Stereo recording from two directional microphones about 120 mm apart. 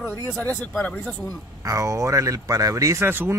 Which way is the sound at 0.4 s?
15° left (ahead or behind).